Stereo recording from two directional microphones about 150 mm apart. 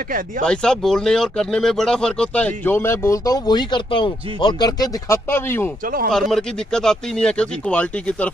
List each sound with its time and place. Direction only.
0.5 s speech: 5° left (ahead or behind)
5.9 s speech: 70° right (ahead or behind)
6.1 s speech: 5° left (ahead or behind)